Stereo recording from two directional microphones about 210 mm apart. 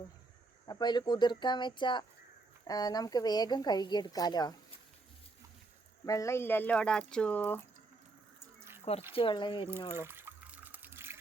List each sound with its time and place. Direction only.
0.7 s a woman's voice: 20° left (ahead or behind)
6.1 s speech: 15° left (ahead or behind)
8.8 s a woman's voice: 30° left (ahead or behind)
9.9 s water: 10° right (ahead or behind)